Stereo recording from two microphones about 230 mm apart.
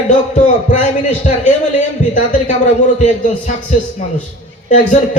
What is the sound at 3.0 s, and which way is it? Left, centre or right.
A man's voice, left.